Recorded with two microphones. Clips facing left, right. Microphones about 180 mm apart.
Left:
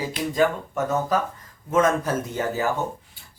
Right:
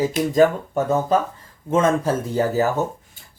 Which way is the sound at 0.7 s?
30° right (ahead or behind).